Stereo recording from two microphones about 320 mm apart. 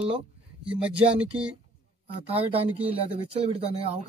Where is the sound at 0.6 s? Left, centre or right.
Centre.